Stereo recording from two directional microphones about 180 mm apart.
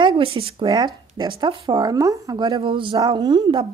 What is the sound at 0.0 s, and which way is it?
A woman's voice, 30° right (ahead or behind).